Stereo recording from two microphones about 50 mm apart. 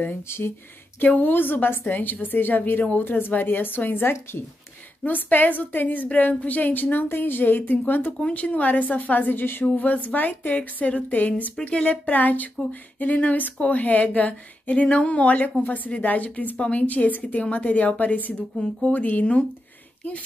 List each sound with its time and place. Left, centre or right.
1.0 s speech: left
1.3 s a woman's voice: left
5.0 s a woman's voice: left
8.2 s a woman's voice: left
9.7 s a woman's voice: left